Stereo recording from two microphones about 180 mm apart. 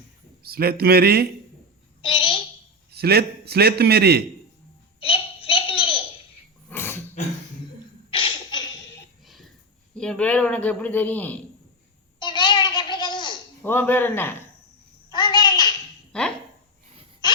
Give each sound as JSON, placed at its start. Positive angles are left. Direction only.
{"t": 0.4, "sound": "a man's voice", "side_deg": -55}
{"t": 2.0, "sound": "a child's voice", "side_deg": 30}
{"t": 2.9, "sound": "a man's voice", "side_deg": -60}
{"t": 4.9, "sound": "a sound", "side_deg": 30}
{"t": 6.7, "sound": "dog", "side_deg": 10}
{"t": 8.1, "sound": "beatboxing", "side_deg": 25}
{"t": 9.2, "sound": "a sound", "side_deg": 0}
{"t": 9.9, "sound": "speech", "side_deg": 5}
{"t": 12.2, "sound": "a sound", "side_deg": 25}
{"t": 13.6, "sound": "speech", "side_deg": 10}
{"t": 15.1, "sound": "a sound", "side_deg": 20}
{"t": 16.1, "sound": "speech", "side_deg": 5}